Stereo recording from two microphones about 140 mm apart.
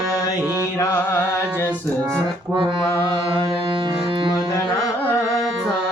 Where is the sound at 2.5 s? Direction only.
35° right (ahead or behind).